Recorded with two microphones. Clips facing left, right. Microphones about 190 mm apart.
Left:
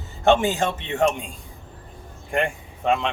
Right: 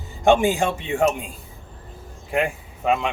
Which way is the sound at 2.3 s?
5° right (ahead or behind).